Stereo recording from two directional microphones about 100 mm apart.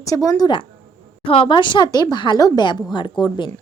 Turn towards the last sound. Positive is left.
turn(degrees=50)  # may be behind; listen again after turning